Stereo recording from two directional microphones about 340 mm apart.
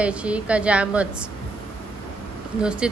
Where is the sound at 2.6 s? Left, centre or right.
Centre.